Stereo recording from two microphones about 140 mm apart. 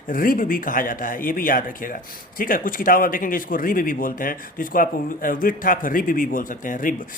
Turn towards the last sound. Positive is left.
turn(degrees=70)  # may be behind; listen again after turning